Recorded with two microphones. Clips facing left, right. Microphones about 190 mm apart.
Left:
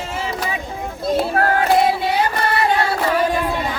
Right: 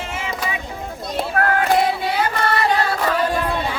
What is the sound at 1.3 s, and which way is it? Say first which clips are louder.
Child singing: left 2 dB; 30° left (ahead or behind).